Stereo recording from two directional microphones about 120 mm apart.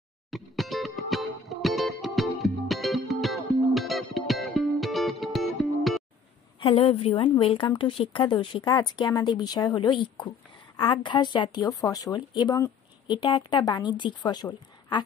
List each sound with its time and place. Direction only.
0.3 s music: centre (ahead or behind)
6.6 s a woman's voice: 55° left (ahead or behind); by 15.0 s 35° left (ahead or behind)